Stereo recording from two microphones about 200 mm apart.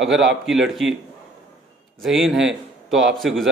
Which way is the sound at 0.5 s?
Centre (ahead or behind).